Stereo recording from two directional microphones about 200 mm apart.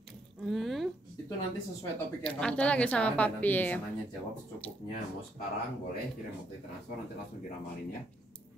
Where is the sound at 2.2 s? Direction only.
5° left (ahead or behind).